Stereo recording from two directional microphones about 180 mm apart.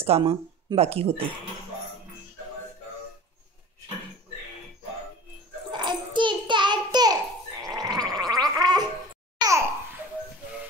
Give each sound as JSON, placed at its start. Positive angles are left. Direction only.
{"t": 0.0, "sound": "speech", "side_deg": -30}
{"t": 5.7, "sound": "bathtub", "side_deg": -25}
{"t": 7.6, "sound": "gargling", "side_deg": -20}
{"t": 9.4, "sound": "babbling", "side_deg": -15}